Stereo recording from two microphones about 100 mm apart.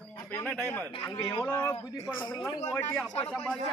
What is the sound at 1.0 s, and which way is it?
Speech, 40° left (ahead or behind).